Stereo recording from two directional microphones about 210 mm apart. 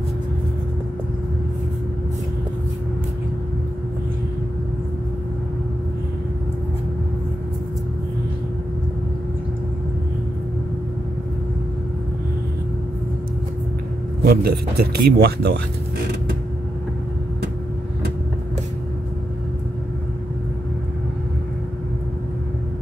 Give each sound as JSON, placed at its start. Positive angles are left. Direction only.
{"t": 14.2, "sound": "speech", "side_deg": -45}